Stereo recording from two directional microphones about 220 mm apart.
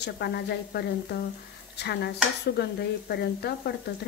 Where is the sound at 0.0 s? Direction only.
50° left (ahead or behind).